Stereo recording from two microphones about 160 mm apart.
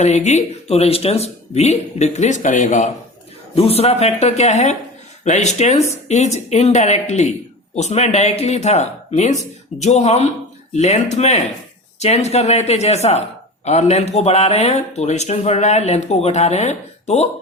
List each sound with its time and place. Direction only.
0.0 s speech: 45° left (ahead or behind)
3.5 s speech: 35° left (ahead or behind)